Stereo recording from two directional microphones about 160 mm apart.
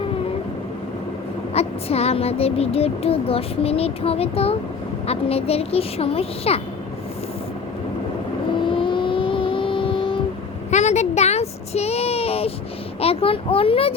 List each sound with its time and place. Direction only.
1.5 s child singing: 40° left (ahead or behind)
8.6 s vehicle: 30° left (ahead or behind)
10.7 s a sound: 45° left (ahead or behind)
13.0 s child singing: 35° left (ahead or behind)